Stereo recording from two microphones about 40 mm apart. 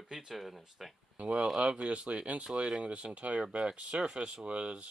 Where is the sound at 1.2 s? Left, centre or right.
Right.